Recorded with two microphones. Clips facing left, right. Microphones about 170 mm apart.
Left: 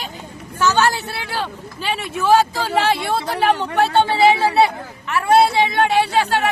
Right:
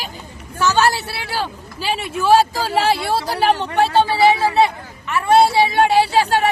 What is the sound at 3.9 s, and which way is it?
Speech, centre (ahead or behind).